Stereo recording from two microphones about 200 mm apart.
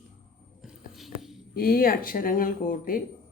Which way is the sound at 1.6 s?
45° left (ahead or behind).